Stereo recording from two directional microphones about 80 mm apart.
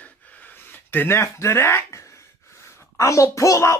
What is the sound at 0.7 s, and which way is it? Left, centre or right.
Speech, left.